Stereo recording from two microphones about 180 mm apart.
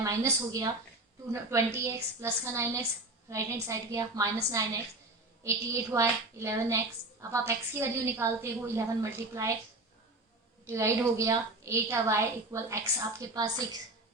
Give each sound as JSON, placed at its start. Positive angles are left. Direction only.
{"t": 0.0, "sound": "a woman's voice", "side_deg": -15}
{"t": 10.7, "sound": "a woman's voice", "side_deg": -15}